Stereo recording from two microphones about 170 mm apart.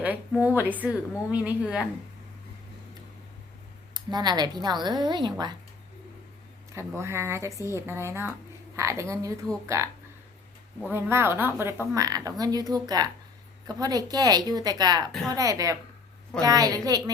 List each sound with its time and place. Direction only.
0.4 s speech: 10° right (ahead or behind)
3.9 s a woman's voice: 25° right (ahead or behind)
6.7 s speech: 15° right (ahead or behind)
10.9 s a woman's voice: 15° right (ahead or behind)